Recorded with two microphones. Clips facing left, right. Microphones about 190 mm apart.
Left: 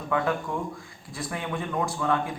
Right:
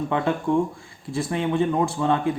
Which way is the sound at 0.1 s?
25° right (ahead or behind).